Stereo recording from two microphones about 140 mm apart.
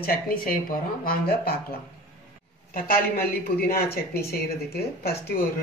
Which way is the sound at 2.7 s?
90° left.